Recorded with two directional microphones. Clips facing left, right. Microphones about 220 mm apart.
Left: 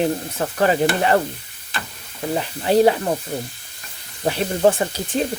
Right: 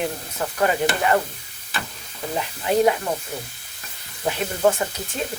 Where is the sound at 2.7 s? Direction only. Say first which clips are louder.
Left 4 dB; 30° left (ahead or behind).